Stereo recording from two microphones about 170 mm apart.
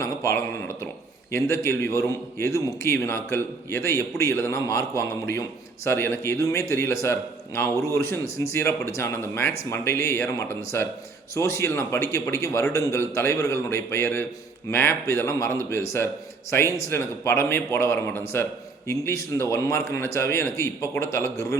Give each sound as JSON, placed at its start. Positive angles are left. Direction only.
{"t": 0.0, "sound": "a man's voice", "side_deg": 15}